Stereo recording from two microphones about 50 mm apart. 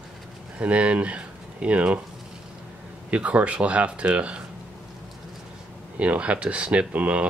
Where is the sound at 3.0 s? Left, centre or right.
Right.